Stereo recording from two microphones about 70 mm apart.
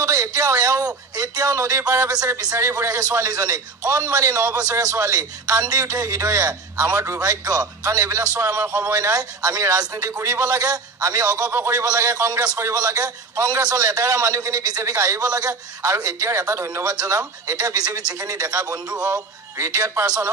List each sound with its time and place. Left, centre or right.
0.0 s a man's voice: right
8.5 s speech: right
8.9 s a man's voice: right
9.6 s a man's voice: right
16.8 s a man's voice: right
19.5 s a man's voice: right